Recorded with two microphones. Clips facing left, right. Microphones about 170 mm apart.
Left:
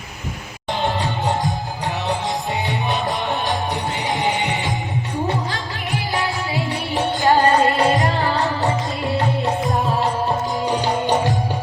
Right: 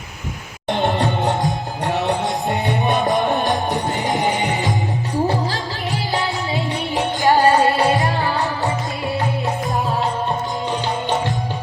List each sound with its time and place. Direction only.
0.7 s music: 60° right (ahead or behind)
1.0 s music: centre (ahead or behind)
2.0 s music: 65° right (ahead or behind)
4.3 s music: 40° right (ahead or behind)
6.1 s music: 20° right (ahead or behind)
7.6 s music: 20° left (ahead or behind)